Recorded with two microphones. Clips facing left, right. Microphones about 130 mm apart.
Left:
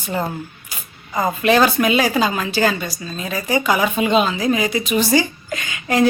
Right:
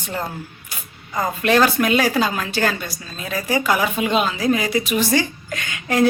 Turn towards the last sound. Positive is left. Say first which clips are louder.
# left 1 dB
turn(degrees=0)  # may be behind; listen again after turning